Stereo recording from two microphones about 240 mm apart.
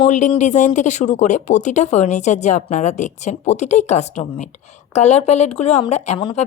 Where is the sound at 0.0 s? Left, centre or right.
Left.